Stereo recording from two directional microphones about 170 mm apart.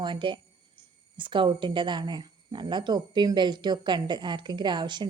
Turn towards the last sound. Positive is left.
turn(degrees=-25)  # may be behind; listen again after turning